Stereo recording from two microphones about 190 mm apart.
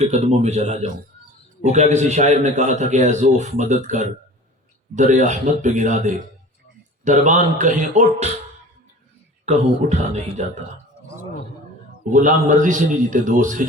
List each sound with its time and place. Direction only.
0.0 s a man's voice: 35° right (ahead or behind)
9.5 s a man's voice: 35° right (ahead or behind)
12.1 s a man's voice: 45° right (ahead or behind)